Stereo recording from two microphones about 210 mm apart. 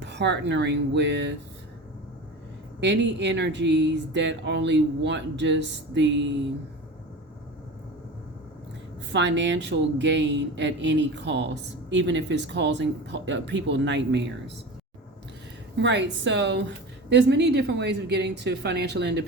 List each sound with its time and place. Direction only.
0.0 s speech: 55° right (ahead or behind)
2.8 s speech: 55° right (ahead or behind)
9.1 s speech: 55° right (ahead or behind)
15.8 s a woman's voice: 55° right (ahead or behind)